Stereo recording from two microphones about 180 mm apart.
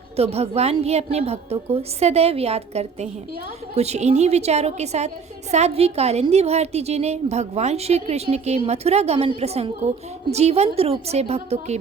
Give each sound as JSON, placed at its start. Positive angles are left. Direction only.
{"t": 0.2, "sound": "a woman's voice", "side_deg": -35}